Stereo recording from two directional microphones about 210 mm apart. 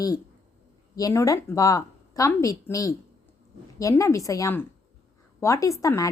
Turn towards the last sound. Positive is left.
turn(degrees=15)  # may be behind; listen again after turning